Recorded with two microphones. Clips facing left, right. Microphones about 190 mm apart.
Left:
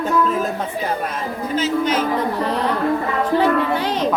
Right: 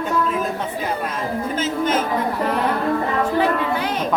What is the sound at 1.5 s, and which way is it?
Music, 50° right (ahead or behind).